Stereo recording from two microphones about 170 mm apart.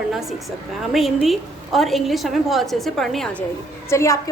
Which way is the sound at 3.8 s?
15° left (ahead or behind).